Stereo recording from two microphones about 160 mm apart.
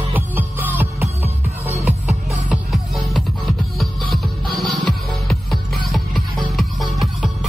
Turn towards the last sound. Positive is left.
turn(degrees=0)  # may be behind; listen again after turning